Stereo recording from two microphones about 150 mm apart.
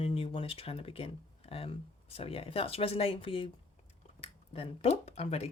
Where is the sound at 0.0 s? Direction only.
40° left (ahead or behind).